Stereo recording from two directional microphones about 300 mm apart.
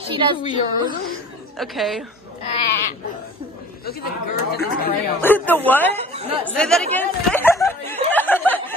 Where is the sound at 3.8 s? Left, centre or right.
Left.